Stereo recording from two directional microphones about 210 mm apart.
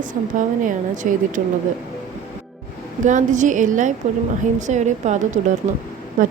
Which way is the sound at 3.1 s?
35° right (ahead or behind).